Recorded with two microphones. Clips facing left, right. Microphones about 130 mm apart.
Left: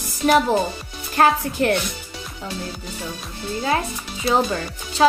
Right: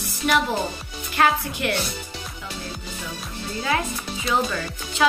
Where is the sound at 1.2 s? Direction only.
40° left (ahead or behind).